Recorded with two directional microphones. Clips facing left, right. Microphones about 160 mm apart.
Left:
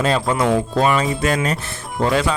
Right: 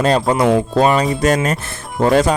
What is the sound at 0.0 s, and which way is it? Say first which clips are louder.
Speech: right 4 dB; 40° right (ahead or behind).